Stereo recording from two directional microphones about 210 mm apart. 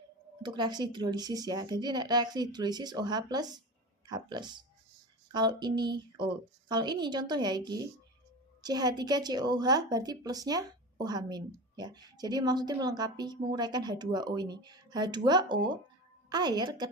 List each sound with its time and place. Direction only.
0.4 s a woman's voice: 20° right (ahead or behind)